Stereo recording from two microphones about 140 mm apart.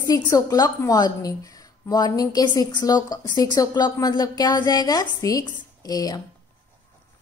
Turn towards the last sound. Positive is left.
turn(degrees=25)  # may be behind; listen again after turning